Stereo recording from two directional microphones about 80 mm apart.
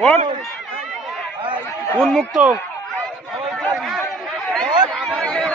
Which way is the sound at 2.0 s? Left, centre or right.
Centre.